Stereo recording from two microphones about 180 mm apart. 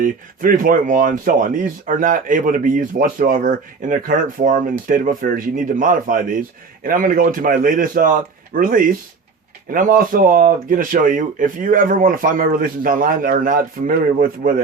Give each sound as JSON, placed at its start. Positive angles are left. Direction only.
{"t": 0.0, "sound": "speech", "side_deg": -50}